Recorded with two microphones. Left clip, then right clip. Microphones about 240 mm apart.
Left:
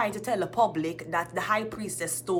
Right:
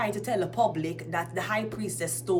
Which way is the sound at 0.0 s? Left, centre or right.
Centre.